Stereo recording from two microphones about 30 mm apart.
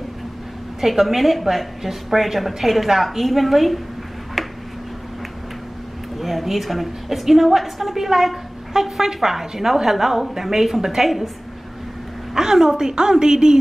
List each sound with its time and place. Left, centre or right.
0.7 s a woman's voice: centre
4.4 s a sound: centre
6.1 s a woman's voice: centre
12.4 s a woman's voice: centre